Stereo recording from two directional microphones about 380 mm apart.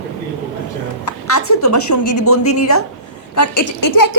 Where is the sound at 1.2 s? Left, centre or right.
Left.